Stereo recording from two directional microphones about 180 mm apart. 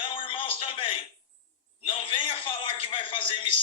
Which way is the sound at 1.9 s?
30° left (ahead or behind).